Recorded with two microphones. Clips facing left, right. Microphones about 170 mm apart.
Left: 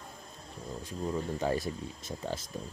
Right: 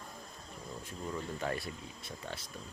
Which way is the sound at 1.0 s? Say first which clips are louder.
Left 6 dB; 30° left (ahead or behind).